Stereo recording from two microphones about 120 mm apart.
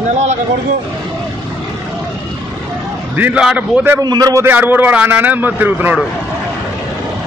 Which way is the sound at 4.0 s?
30° right (ahead or behind).